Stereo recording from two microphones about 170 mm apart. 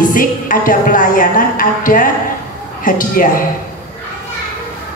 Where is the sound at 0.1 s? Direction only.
55° left (ahead or behind).